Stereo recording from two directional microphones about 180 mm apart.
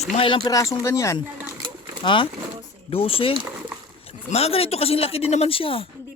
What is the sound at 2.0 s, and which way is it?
Speech, 25° left (ahead or behind).